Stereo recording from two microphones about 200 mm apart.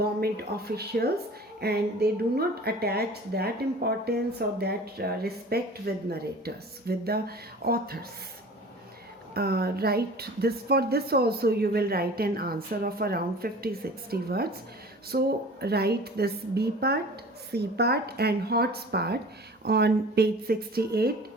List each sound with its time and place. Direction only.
0.0 s a woman's voice: 50° right (ahead or behind)
9.3 s a woman's voice: 50° right (ahead or behind)